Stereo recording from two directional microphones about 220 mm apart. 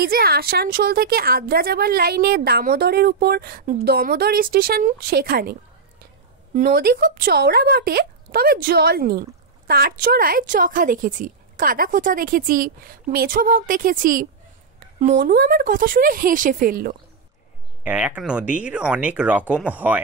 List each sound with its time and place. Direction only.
0.0 s a woman's voice: 45° right (ahead or behind)
17.8 s speech: 5° right (ahead or behind)